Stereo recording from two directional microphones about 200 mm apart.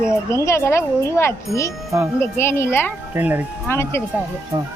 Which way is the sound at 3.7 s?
10° left (ahead or behind).